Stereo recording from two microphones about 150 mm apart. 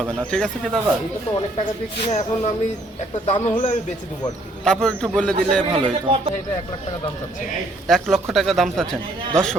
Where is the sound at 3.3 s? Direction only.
35° left (ahead or behind).